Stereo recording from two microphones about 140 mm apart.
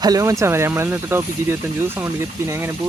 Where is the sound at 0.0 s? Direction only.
25° right (ahead or behind).